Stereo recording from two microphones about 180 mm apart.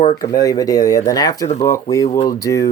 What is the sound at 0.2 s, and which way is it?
Speech, 20° left (ahead or behind).